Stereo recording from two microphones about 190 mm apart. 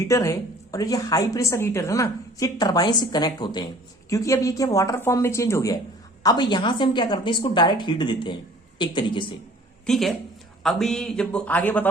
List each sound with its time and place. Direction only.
0.1 s a woman's voice: 15° left (ahead or behind)
9.8 s speech: centre (ahead or behind)